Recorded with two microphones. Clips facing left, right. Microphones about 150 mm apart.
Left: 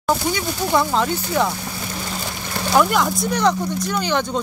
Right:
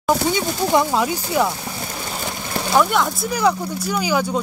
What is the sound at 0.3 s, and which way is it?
Speech, 20° right (ahead or behind).